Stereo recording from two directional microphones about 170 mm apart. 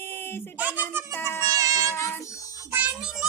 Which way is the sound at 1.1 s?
15° left (ahead or behind).